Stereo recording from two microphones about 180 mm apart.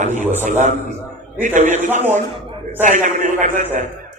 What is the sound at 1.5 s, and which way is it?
A man's voice, 45° right (ahead or behind).